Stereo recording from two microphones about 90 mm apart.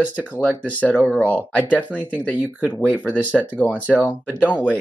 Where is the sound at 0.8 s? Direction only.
5° left (ahead or behind).